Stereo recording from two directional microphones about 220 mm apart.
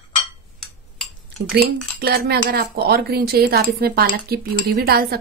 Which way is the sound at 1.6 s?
45° right (ahead or behind).